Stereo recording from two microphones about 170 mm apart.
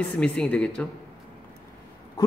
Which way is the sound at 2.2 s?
20° left (ahead or behind).